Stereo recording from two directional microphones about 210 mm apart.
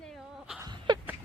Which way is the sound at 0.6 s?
20° right (ahead or behind).